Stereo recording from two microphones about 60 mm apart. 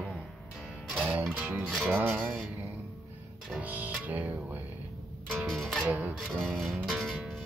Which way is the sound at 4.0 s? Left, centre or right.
Right.